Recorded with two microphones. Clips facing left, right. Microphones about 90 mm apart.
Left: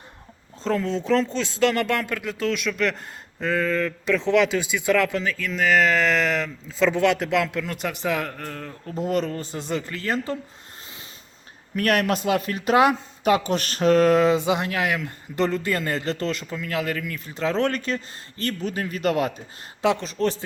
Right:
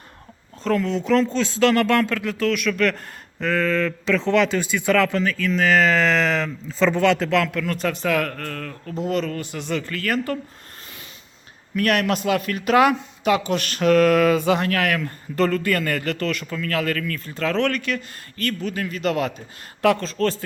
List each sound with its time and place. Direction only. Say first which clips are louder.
0.6 s speech: right 2 dB; 25° left (ahead or behind)
9.0 s speech: even; 40° left (ahead or behind)
9.3 s speech: right 1 dB; 30° left (ahead or behind)
11.7 s speech: right 1 dB; 35° left (ahead or behind)
19.8 s speech: right 3 dB; 20° left (ahead or behind)